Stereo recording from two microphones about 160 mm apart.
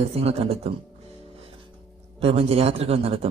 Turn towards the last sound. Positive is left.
turn(degrees=-40)  # may be behind; listen again after turning